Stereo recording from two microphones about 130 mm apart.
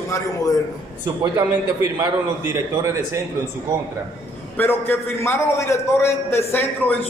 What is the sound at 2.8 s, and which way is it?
Speech, 20° right (ahead or behind).